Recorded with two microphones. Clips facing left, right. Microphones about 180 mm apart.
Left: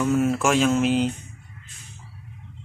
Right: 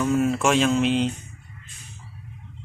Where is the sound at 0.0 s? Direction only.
5° left (ahead or behind).